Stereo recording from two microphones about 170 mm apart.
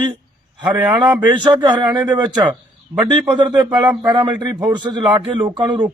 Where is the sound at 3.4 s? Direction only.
25° right (ahead or behind).